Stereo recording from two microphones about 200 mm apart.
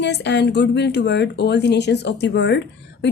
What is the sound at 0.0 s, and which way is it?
A woman's voice, 60° left (ahead or behind).